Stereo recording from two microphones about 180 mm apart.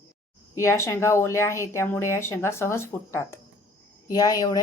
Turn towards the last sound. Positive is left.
turn(degrees=20)  # may be behind; listen again after turning